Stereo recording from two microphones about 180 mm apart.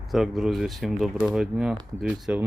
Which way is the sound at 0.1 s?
Centre (ahead or behind).